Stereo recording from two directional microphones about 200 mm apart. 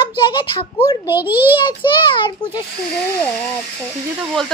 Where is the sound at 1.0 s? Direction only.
10° right (ahead or behind).